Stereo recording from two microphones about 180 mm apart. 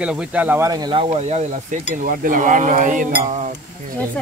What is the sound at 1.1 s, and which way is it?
Speech, 40° right (ahead or behind).